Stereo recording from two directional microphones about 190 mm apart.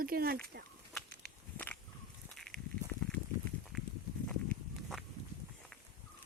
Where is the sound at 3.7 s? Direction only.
Centre (ahead or behind).